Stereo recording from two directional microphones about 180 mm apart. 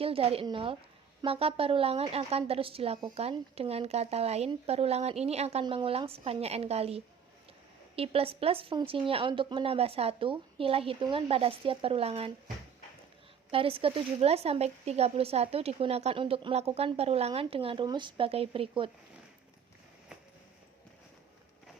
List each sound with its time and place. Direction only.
0.0 s a woman's voice: 30° right (ahead or behind)
13.5 s a woman's voice: 30° right (ahead or behind)